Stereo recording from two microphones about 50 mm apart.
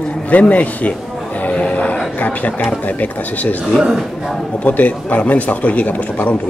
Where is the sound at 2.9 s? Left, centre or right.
Left.